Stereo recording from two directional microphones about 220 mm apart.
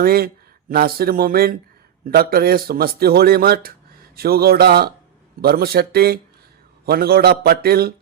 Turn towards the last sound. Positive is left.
turn(degrees=-45)  # may be behind; listen again after turning